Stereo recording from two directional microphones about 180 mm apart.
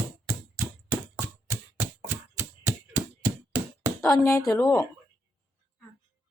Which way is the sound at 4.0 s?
5° left (ahead or behind).